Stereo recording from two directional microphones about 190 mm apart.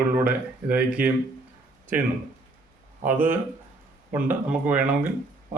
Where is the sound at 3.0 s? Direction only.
10° right (ahead or behind).